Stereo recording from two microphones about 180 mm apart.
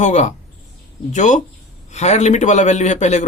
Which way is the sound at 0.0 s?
40° left (ahead or behind).